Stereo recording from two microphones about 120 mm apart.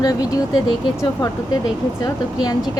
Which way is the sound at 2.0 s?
35° left (ahead or behind).